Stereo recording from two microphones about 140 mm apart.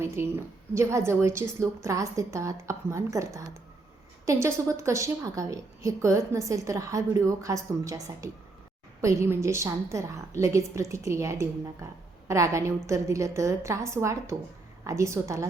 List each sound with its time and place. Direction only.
0.0 s a woman's voice: 20° right (ahead or behind)